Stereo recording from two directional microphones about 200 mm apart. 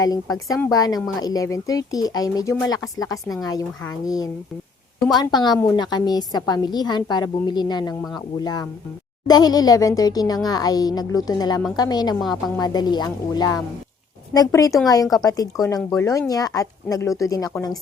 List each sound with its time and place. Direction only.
0.0 s speech: 20° left (ahead or behind)
9.2 s speech: 20° left (ahead or behind)